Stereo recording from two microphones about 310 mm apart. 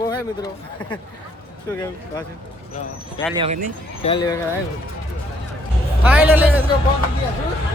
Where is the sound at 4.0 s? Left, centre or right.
Centre.